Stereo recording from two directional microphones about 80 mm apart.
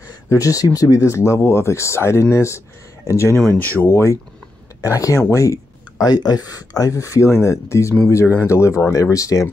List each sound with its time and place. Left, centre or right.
0.3 s speech: left
3.5 s speech: left